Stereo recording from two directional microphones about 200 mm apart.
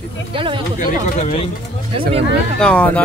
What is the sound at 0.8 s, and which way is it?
Speech, 45° left (ahead or behind).